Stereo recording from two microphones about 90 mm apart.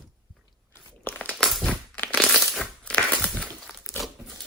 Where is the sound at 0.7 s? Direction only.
30° left (ahead or behind).